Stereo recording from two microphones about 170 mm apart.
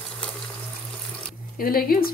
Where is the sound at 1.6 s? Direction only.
60° left (ahead or behind).